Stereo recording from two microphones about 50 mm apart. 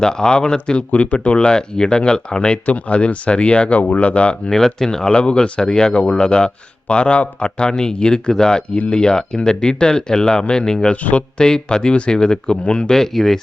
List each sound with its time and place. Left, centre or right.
0.0 s speech: centre
0.9 s speech: left
4.4 s speech: centre